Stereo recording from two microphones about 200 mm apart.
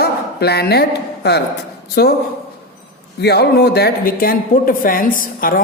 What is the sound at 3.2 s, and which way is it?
Speech, 55° left (ahead or behind).